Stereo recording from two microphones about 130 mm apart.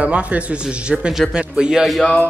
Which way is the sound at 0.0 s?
10° right (ahead or behind).